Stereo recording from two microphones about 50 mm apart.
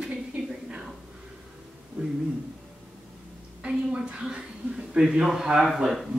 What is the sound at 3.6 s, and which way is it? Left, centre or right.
A woman's voice, right.